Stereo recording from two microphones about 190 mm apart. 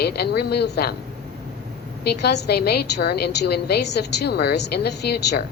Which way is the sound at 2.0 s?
60° left (ahead or behind).